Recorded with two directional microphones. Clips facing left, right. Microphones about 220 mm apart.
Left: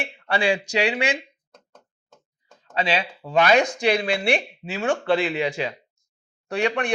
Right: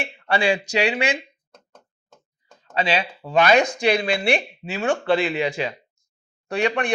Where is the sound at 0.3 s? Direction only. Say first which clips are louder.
Right 1 dB; 15° right (ahead or behind).